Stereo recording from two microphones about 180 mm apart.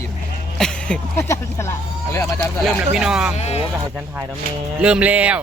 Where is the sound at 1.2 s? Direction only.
15° left (ahead or behind).